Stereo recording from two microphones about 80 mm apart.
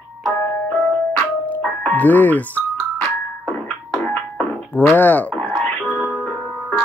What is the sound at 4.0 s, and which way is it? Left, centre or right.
Music, centre.